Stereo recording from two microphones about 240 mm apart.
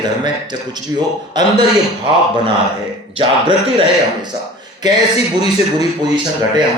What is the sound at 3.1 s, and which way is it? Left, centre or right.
Speech, right.